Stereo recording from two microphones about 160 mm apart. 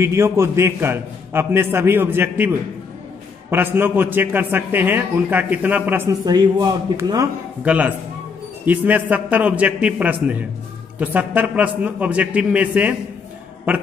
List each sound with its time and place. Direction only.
0.0 s a man's voice: 15° right (ahead or behind)
6.2 s a man's voice: 25° right (ahead or behind)
7.6 s a man's voice: 10° right (ahead or behind)